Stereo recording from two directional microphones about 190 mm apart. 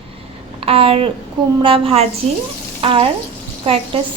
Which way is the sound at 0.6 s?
30° right (ahead or behind).